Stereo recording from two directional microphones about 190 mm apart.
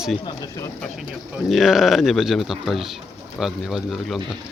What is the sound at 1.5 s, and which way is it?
Speech, centre (ahead or behind).